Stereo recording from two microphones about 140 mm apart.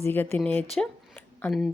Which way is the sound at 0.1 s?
15° left (ahead or behind).